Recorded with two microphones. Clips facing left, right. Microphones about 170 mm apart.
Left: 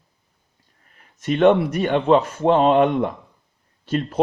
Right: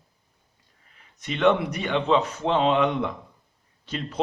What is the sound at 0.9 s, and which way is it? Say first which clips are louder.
A man's voice: left 9 dB; 50° left (ahead or behind).